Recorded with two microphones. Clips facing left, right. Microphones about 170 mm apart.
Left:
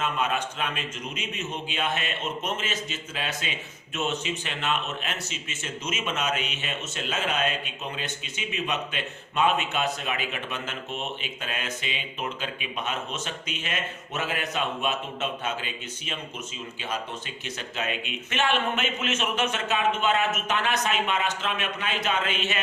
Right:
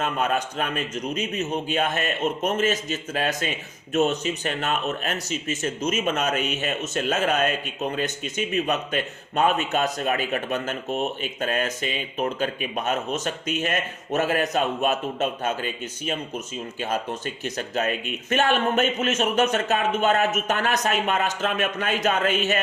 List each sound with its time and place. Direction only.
0.0 s a man's voice: 40° right (ahead or behind)